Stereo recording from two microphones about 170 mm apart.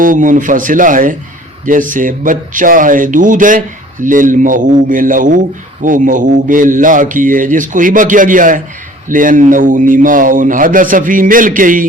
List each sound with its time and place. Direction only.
0.0 s a man's voice: 50° right (ahead or behind)